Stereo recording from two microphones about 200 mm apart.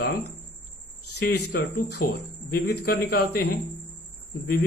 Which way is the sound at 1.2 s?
55° left (ahead or behind).